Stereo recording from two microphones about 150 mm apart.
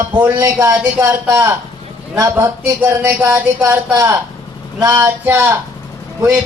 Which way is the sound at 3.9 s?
20° right (ahead or behind).